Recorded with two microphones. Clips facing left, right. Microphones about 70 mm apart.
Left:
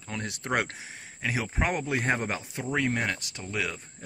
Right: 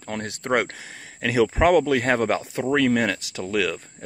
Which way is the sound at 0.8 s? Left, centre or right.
Right.